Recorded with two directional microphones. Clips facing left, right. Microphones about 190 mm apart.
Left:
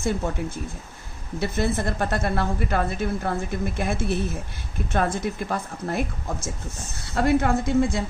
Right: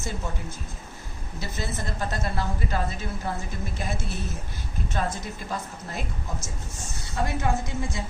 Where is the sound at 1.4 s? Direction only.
60° left (ahead or behind).